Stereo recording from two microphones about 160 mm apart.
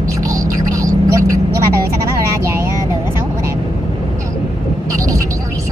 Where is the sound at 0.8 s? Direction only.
20° right (ahead or behind).